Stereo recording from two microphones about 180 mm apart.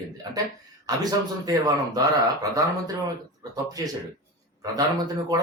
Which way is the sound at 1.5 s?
20° right (ahead or behind).